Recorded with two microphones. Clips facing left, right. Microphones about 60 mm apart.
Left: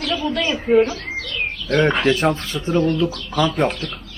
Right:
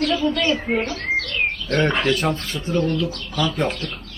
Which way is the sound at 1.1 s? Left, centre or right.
Right.